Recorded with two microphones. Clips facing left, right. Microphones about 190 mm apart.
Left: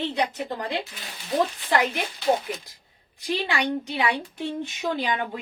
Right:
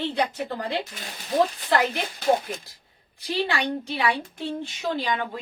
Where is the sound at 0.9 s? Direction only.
45° right (ahead or behind).